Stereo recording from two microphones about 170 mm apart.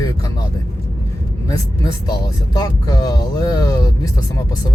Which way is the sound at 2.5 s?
20° left (ahead or behind).